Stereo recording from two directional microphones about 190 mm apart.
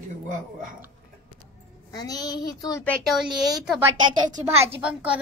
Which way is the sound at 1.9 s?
20° left (ahead or behind).